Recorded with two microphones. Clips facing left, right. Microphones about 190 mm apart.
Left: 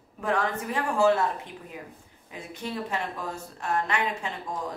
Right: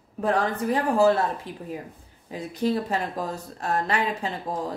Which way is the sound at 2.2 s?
35° right (ahead or behind).